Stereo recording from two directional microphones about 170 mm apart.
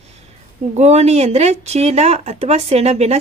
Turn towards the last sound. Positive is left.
turn(degrees=-40)  # may be behind; listen again after turning